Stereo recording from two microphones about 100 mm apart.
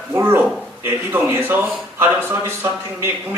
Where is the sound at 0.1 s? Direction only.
25° right (ahead or behind).